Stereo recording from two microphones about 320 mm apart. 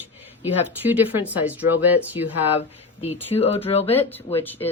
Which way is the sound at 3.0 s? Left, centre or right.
Centre.